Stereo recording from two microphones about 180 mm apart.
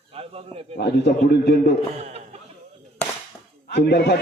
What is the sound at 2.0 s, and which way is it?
Speech, 40° right (ahead or behind).